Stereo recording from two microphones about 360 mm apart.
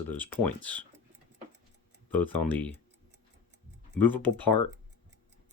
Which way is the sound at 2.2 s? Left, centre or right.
Centre.